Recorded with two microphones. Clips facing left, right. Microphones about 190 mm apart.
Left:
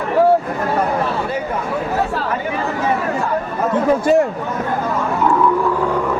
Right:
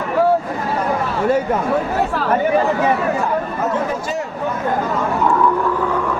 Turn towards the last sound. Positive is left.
turn(degrees=55)  # may be behind; listen again after turning